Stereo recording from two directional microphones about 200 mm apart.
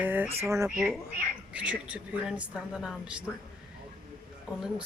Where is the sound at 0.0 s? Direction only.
10° right (ahead or behind).